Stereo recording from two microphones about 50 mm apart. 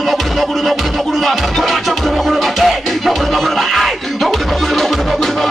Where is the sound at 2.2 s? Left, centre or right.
Centre.